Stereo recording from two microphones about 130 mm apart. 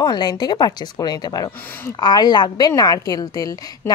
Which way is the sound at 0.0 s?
35° left (ahead or behind).